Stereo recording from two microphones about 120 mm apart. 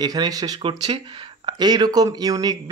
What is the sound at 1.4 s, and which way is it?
Speech, 35° right (ahead or behind).